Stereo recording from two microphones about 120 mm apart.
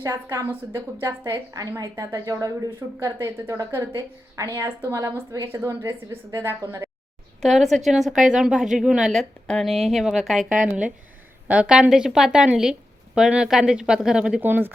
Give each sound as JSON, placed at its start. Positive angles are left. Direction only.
{"t": 0.0, "sound": "a woman's voice", "side_deg": -25}
{"t": 7.4, "sound": "a woman's voice", "side_deg": 0}